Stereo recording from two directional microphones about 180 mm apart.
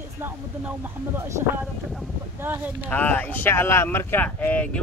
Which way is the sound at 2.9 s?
10° left (ahead or behind).